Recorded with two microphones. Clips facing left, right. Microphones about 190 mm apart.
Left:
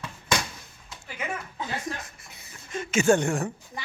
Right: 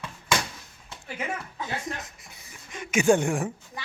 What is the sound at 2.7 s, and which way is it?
Speech, 15° right (ahead or behind).